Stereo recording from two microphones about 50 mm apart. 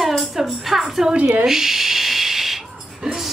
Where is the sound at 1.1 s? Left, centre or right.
Right.